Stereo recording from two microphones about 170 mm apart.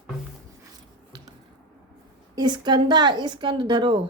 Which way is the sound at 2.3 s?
25° right (ahead or behind).